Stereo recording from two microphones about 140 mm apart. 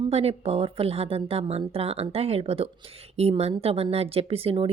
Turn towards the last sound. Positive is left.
turn(degrees=-45)  # may be behind; listen again after turning